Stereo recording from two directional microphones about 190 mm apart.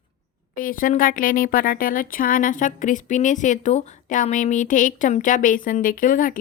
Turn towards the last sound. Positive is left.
turn(degrees=45)  # may be behind; listen again after turning